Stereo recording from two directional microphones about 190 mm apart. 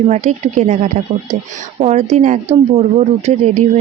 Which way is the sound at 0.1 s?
35° right (ahead or behind).